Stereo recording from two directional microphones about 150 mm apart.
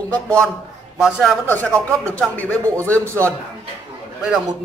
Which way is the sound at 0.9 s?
Centre (ahead or behind).